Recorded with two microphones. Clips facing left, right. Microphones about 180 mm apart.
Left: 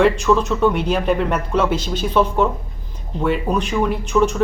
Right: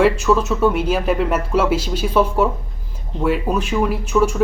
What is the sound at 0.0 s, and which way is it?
Speech, 5° right (ahead or behind).